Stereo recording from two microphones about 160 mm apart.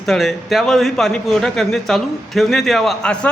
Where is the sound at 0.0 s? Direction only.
Centre (ahead or behind).